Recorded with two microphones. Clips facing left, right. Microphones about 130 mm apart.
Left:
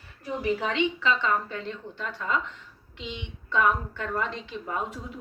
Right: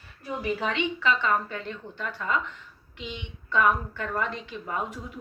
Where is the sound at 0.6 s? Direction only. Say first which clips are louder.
Left 1 dB; 20° left (ahead or behind).